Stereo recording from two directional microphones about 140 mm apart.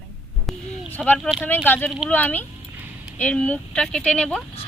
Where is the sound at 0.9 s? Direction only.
10° left (ahead or behind).